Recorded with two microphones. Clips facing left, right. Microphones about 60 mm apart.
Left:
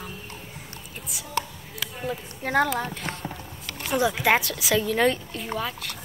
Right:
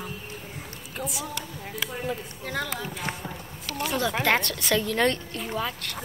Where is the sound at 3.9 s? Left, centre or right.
Centre.